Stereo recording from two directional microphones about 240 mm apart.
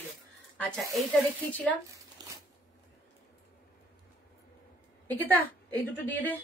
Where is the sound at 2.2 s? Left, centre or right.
Centre.